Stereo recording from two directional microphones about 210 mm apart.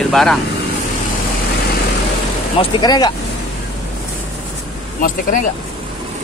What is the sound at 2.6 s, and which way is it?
Speech, 20° left (ahead or behind).